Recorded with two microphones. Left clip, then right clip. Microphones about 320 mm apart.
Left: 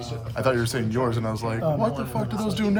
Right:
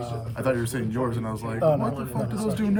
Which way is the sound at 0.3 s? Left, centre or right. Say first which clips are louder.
Left 3 dB; left.